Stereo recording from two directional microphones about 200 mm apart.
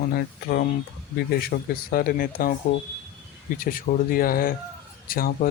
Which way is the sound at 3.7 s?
45° left (ahead or behind).